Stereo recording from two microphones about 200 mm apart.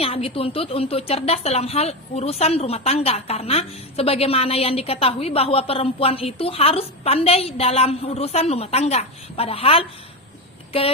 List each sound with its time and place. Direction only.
0.0 s a woman's voice: 30° left (ahead or behind)